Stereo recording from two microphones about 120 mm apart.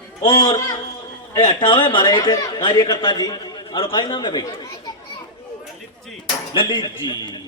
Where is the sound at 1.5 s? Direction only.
40° left (ahead or behind).